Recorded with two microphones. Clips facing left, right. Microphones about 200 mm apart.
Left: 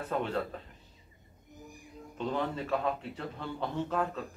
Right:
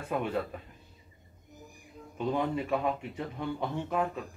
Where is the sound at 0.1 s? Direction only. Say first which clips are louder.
Right 2 dB; 10° right (ahead or behind).